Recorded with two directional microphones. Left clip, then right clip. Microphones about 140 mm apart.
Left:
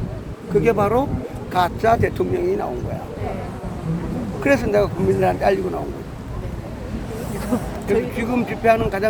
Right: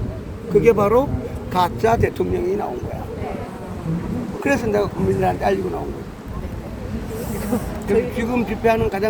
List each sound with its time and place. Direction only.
0.6 s speech: 10° left (ahead or behind)
4.4 s speech: 20° left (ahead or behind)
8.1 s speech: 10° left (ahead or behind)